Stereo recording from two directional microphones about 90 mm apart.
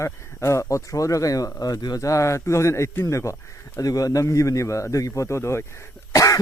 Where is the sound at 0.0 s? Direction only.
35° left (ahead or behind).